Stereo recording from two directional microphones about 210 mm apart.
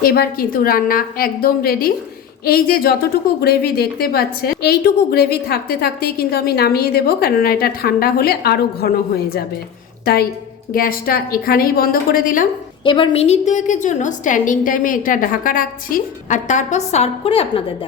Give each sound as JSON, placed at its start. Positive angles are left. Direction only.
{"t": 0.0, "sound": "a woman's voice", "side_deg": 45}
{"t": 10.7, "sound": "a woman's voice", "side_deg": 45}
{"t": 12.8, "sound": "a woman's voice", "side_deg": 25}